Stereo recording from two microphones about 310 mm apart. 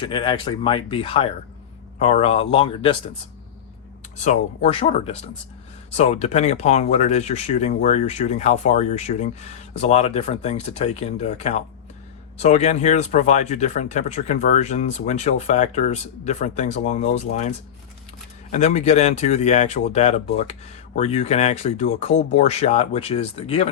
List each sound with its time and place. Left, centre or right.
0.0 s speech: centre
4.2 s speech: left
18.5 s speech: left